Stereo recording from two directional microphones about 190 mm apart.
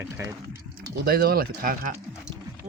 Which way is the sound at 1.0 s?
50° right (ahead or behind).